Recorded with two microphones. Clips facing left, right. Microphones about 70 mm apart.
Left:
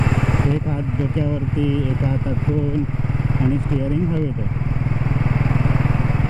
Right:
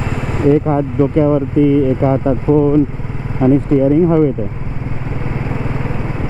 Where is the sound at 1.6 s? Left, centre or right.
Right.